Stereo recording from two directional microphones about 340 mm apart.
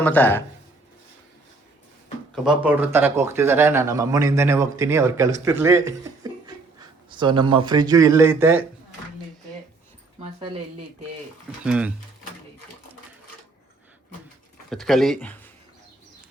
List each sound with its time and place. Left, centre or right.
0.0 s a man's voice: centre
2.3 s speech: centre
10.2 s speech: centre
11.6 s a man's voice: centre
14.7 s speech: centre